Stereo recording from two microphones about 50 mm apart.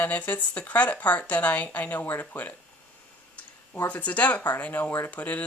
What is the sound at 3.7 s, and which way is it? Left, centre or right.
Speech, left.